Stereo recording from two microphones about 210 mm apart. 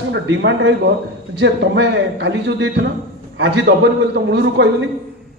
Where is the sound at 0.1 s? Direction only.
60° right (ahead or behind).